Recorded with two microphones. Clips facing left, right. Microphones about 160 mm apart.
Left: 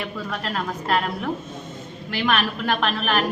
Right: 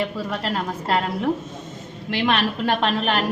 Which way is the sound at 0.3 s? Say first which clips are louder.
Right 2 dB; 25° right (ahead or behind).